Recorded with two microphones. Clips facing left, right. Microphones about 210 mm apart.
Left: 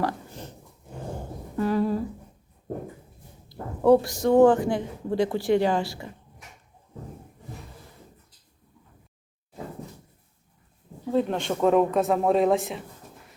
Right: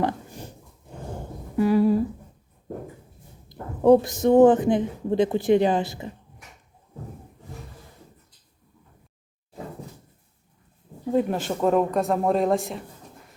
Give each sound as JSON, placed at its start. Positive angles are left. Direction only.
{"t": 0.0, "sound": "pig", "side_deg": -15}
{"t": 1.5, "sound": "humming", "side_deg": -10}
{"t": 3.5, "sound": "speech", "side_deg": -20}
{"t": 11.1, "sound": "speech", "side_deg": -10}